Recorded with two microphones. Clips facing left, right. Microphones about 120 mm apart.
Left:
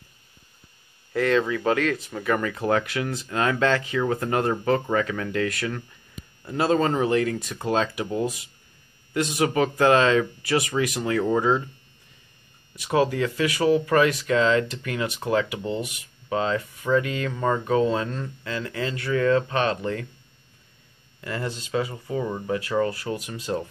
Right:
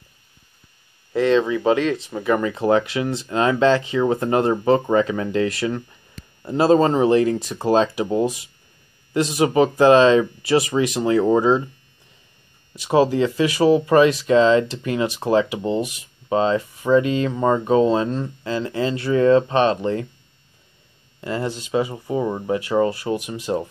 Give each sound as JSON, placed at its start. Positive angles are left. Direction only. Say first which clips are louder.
{"t": 1.1, "sound": "speech", "louder": "right 4 dB", "side_deg": -25}
{"t": 2.5, "sound": "speech", "louder": "right 5 dB", "side_deg": -25}
{"t": 12.7, "sound": "speech", "louder": "right 5 dB", "side_deg": -25}
{"t": 21.2, "sound": "speech", "louder": "right 5 dB", "side_deg": -25}